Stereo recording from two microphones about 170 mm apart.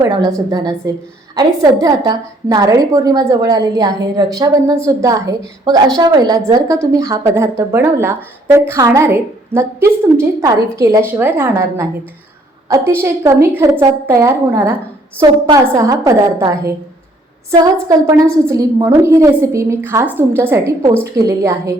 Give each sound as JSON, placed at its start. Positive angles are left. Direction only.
{"t": 0.0, "sound": "a woman's voice", "side_deg": -20}